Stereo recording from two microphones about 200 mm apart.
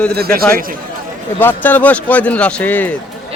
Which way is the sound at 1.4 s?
10° left (ahead or behind).